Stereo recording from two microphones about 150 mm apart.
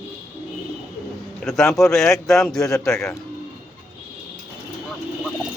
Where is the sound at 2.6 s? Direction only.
25° left (ahead or behind).